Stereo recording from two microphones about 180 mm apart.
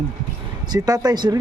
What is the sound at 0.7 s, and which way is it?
Speech, 20° right (ahead or behind).